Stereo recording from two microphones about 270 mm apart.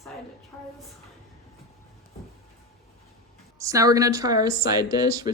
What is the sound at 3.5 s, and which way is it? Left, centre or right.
A woman's voice, centre.